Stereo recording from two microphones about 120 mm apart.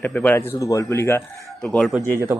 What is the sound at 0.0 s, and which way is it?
A man's voice, 15° left (ahead or behind).